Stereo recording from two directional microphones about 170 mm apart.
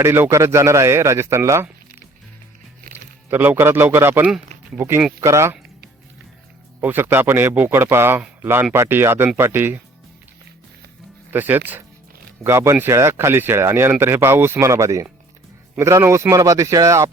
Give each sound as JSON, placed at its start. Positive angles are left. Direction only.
{"t": 0.0, "sound": "speech", "side_deg": -15}
{"t": 3.2, "sound": "speech", "side_deg": -10}
{"t": 6.8, "sound": "speech", "side_deg": -10}
{"t": 11.3, "sound": "speech", "side_deg": -10}